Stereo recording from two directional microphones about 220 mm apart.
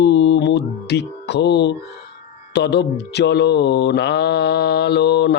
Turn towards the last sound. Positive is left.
turn(degrees=50)  # may be behind; listen again after turning